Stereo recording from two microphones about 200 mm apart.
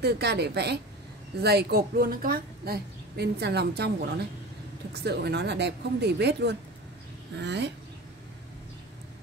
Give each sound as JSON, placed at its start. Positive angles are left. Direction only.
{"t": 0.0, "sound": "a woman's voice", "side_deg": -55}
{"t": 4.9, "sound": "speech", "side_deg": -55}